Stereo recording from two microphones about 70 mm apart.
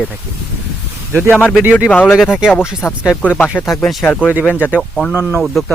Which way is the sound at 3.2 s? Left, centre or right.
Left.